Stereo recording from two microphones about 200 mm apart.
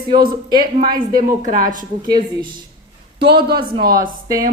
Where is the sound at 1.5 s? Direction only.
40° right (ahead or behind).